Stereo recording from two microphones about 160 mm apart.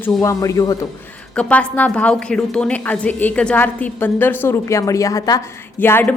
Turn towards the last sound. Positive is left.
turn(degrees=15)  # may be behind; listen again after turning